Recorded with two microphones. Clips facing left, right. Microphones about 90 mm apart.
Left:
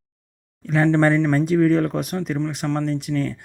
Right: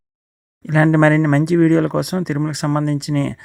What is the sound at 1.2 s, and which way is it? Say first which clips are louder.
Speech: right 4 dB; 70° right (ahead or behind).